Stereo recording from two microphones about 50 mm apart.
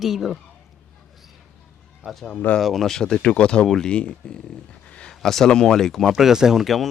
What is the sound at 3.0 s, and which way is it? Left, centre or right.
Speech, centre.